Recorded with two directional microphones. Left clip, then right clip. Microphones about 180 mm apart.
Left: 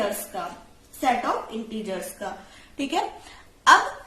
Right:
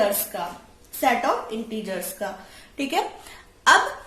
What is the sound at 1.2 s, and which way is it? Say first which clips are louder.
A woman's voice: right 3 dB; 35° right (ahead or behind).